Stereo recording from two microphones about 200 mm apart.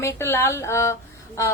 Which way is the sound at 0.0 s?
15° left (ahead or behind).